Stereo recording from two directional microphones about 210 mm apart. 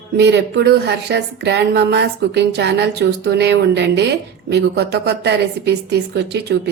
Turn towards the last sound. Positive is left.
turn(degrees=-50)  # may be behind; listen again after turning